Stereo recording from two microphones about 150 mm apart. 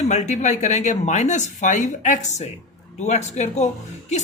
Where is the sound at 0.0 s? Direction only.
50° left (ahead or behind).